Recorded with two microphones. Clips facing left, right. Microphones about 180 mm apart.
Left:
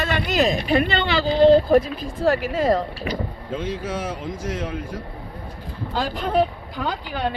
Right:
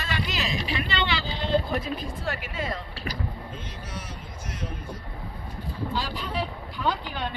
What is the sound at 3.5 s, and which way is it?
Speech, 90° left.